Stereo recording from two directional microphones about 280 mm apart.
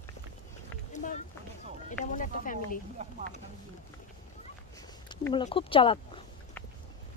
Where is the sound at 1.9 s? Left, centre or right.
Left.